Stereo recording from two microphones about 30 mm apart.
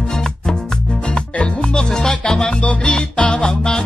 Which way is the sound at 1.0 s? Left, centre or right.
Left.